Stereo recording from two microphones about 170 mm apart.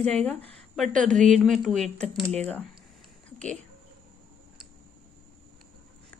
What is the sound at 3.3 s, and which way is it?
Speech, 5° left (ahead or behind).